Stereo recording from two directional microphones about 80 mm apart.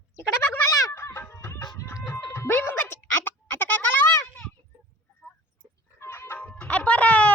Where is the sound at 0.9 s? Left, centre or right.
Left.